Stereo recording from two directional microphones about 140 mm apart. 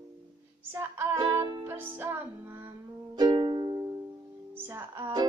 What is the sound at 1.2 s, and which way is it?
Music, 30° right (ahead or behind).